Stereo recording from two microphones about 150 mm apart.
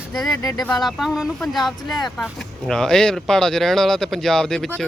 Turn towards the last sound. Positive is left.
turn(degrees=5)  # may be behind; listen again after turning